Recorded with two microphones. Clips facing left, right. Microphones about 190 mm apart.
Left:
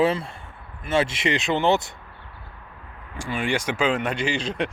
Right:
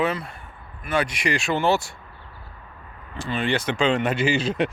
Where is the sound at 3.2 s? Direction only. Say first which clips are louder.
Right 1 dB; 10° left (ahead or behind); by 4.7 s 5° right (ahead or behind).